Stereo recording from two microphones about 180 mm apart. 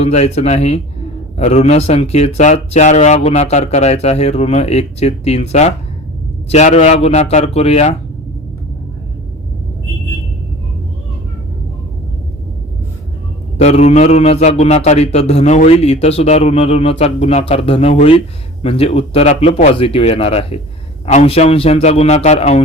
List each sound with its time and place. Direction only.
0.0 s a man's voice: 35° left (ahead or behind)
13.6 s a man's voice: 35° left (ahead or behind)